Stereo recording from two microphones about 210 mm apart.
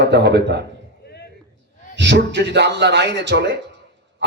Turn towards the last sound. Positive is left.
turn(degrees=-55)  # may be behind; listen again after turning